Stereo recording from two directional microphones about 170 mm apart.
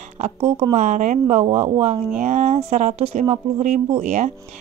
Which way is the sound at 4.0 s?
45° right (ahead or behind).